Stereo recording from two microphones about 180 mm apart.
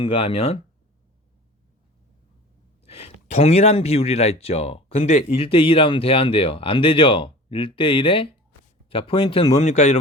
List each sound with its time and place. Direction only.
0.0 s speech: 35° left (ahead or behind)
2.8 s speech: 35° left (ahead or behind)